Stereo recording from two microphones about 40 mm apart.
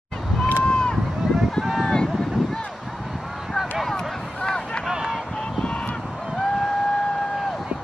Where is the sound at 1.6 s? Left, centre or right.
Centre.